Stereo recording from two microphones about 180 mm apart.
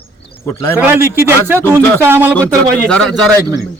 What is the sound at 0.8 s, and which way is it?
Speech, 15° right (ahead or behind).